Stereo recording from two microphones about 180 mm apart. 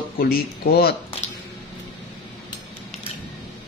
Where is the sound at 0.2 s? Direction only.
55° left (ahead or behind).